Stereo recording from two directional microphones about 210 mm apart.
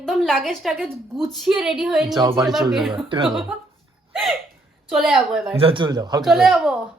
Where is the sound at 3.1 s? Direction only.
25° right (ahead or behind).